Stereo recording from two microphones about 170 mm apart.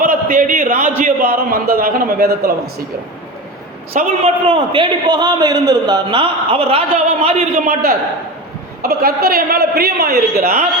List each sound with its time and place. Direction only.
0.0 s a sound: 55° right (ahead or behind)
1.0 s a woman's voice: 55° right (ahead or behind)
4.2 s a man's voice: 35° right (ahead or behind)
7.5 s a woman's voice: 60° right (ahead or behind)